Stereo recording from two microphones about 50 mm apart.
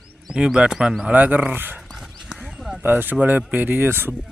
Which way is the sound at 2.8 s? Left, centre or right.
Right.